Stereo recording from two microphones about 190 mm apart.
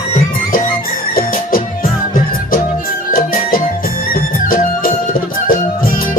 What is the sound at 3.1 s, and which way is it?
Music, 50° left (ahead or behind).